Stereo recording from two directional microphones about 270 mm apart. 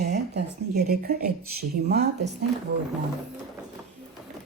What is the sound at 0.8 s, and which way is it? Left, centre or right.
Speech, right.